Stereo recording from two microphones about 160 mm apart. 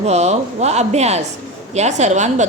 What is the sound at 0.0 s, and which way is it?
A woman's voice, 45° right (ahead or behind).